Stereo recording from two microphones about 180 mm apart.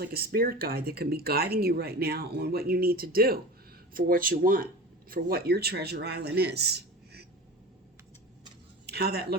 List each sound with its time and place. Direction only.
0.0 s speech: 60° right (ahead or behind)
8.9 s speech: 60° right (ahead or behind)